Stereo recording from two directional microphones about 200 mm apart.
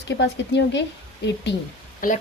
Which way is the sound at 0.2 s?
60° left (ahead or behind).